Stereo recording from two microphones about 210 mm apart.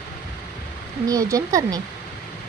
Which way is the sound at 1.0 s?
15° right (ahead or behind).